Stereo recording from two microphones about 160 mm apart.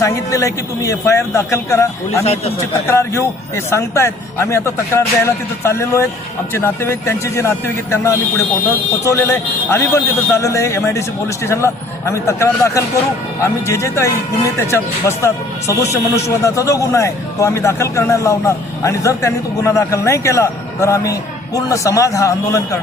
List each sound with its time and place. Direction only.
0.0 s speech: 20° left (ahead or behind)
2.2 s a man's voice: 40° left (ahead or behind)
2.9 s a man's voice: 15° left (ahead or behind)